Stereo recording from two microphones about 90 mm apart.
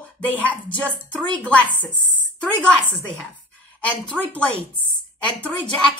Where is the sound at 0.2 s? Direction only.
15° left (ahead or behind).